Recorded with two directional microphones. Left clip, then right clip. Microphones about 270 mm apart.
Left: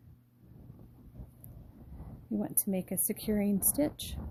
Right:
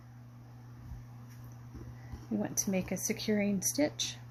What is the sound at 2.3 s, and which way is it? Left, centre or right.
Speech, left.